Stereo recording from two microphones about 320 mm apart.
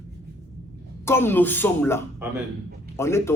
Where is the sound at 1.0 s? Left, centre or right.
Centre.